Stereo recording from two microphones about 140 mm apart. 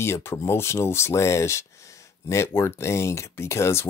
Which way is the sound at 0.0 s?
20° left (ahead or behind).